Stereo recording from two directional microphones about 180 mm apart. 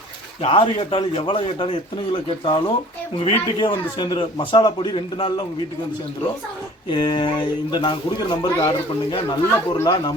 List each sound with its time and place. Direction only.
0.4 s a man's voice: 30° left (ahead or behind)
6.9 s speech: 25° left (ahead or behind)